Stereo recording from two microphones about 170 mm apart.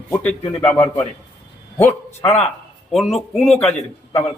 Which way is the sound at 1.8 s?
40° left (ahead or behind).